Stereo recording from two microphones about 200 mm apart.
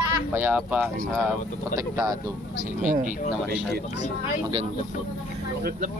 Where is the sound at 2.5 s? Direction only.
40° right (ahead or behind).